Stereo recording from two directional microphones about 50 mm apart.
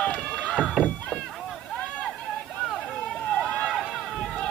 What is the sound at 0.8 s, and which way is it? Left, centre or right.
Chop, centre.